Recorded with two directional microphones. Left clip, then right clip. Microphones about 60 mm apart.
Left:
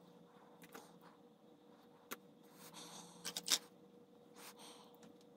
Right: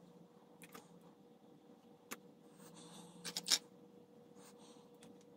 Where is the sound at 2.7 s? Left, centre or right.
Left.